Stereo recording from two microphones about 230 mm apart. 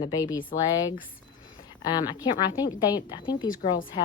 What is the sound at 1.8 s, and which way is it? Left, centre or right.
A woman's voice, centre.